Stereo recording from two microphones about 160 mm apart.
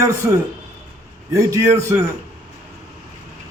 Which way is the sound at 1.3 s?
20° right (ahead or behind).